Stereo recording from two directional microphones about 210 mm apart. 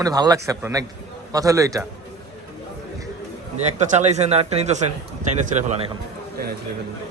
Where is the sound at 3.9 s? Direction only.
35° right (ahead or behind).